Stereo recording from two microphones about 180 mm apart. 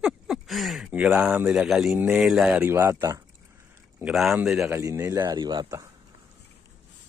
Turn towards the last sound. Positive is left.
turn(degrees=-20)  # may be behind; listen again after turning